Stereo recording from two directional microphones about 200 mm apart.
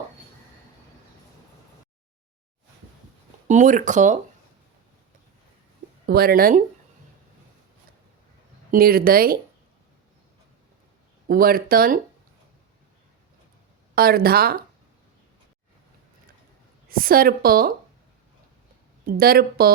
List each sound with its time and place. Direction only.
3.4 s speech: 40° right (ahead or behind)
6.1 s a woman's voice: 50° right (ahead or behind)
8.7 s a woman's voice: 45° right (ahead or behind)
11.3 s a woman's voice: 45° right (ahead or behind)
13.9 s a woman's voice: 50° right (ahead or behind)
16.9 s a woman's voice: 45° right (ahead or behind)
19.0 s a woman's voice: 50° right (ahead or behind)